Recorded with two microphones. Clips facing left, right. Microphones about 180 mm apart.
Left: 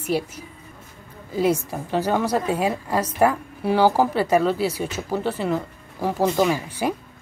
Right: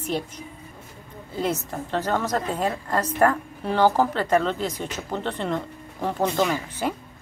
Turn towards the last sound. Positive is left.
turn(degrees=10)  # may be behind; listen again after turning